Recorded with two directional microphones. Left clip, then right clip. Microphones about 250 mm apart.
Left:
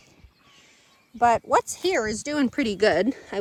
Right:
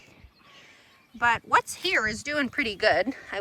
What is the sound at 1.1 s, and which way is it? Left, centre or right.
Speech, centre.